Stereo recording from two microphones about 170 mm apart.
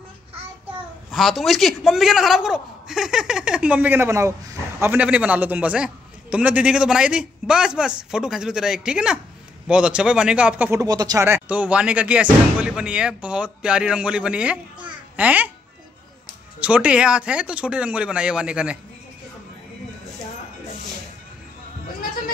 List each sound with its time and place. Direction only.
1.1 s a man's voice: centre (ahead or behind)
16.5 s speech: 10° right (ahead or behind)